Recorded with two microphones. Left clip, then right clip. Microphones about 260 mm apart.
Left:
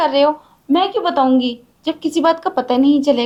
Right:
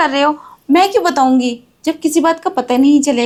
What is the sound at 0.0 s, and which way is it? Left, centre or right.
Speech, right.